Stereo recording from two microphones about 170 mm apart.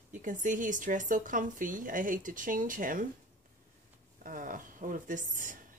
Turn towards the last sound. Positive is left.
turn(degrees=-50)  # may be behind; listen again after turning